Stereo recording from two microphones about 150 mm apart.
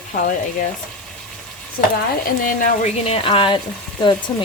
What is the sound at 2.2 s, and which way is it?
Speech, 65° left (ahead or behind).